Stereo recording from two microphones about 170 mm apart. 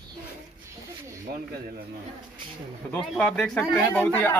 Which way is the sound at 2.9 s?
5° left (ahead or behind).